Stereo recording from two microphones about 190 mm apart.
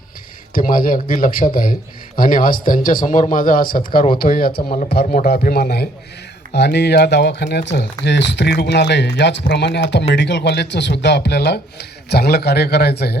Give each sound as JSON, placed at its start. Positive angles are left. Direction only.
{"t": 0.5, "sound": "speech", "side_deg": 50}